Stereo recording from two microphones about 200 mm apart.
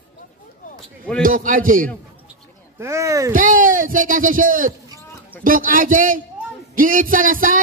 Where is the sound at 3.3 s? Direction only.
45° right (ahead or behind).